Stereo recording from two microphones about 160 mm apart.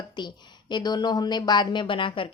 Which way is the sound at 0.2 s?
30° left (ahead or behind).